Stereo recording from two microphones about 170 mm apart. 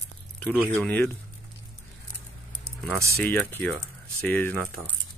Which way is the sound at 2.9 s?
15° right (ahead or behind).